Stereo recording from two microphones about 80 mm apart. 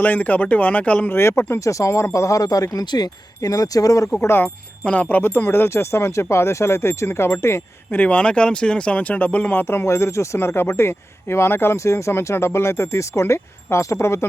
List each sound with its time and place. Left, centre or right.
0.0 s speech: left
1.1 s speech: left
4.2 s speech: left
7.9 s speech: centre; by 14.3 s left